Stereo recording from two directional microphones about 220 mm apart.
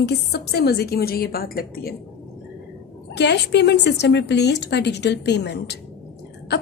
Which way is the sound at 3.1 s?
50° left (ahead or behind).